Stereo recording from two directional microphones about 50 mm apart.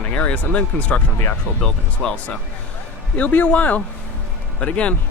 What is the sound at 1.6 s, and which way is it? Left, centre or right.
Speech, centre.